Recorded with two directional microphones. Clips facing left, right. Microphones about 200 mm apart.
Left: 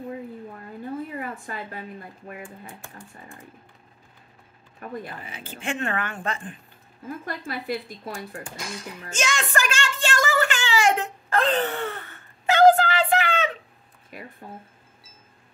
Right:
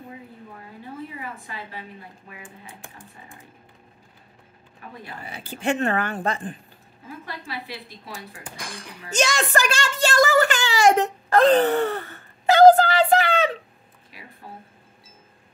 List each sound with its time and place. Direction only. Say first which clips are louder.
1.1 s a woman's voice: left 3 dB; 50° left (ahead or behind)
2.4 s speech: left 3 dB; 15° right (ahead or behind)
4.8 s speech: left 7 dB; 50° left (ahead or behind)
5.2 s speech: right 6 dB; 35° right (ahead or behind)
7.1 s speech: left 4 dB; 50° left (ahead or behind)
9.1 s a sound: right 4 dB; 35° right (ahead or behind)
14.1 s speech: left 7 dB; 50° left (ahead or behind)